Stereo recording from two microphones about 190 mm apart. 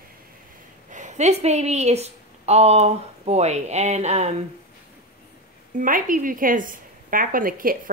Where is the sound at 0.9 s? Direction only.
40° right (ahead or behind).